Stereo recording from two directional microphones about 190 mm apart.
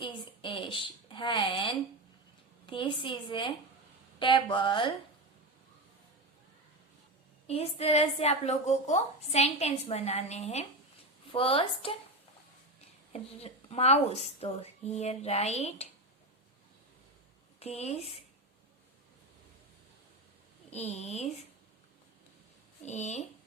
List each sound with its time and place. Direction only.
0.0 s a woman's voice: 25° left (ahead or behind)
7.4 s a woman's voice: 35° left (ahead or behind)
13.1 s a woman's voice: 35° left (ahead or behind)
17.6 s a woman's voice: 35° left (ahead or behind)
20.7 s a woman's voice: 35° left (ahead or behind)
22.9 s a woman's voice: 35° left (ahead or behind)